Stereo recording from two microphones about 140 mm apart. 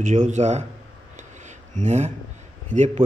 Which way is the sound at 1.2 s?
60° right (ahead or behind).